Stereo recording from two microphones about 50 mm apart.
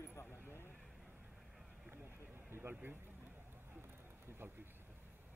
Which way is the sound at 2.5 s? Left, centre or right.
Right.